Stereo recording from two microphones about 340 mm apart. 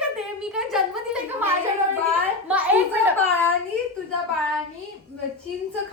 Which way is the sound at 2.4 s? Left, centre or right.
Centre.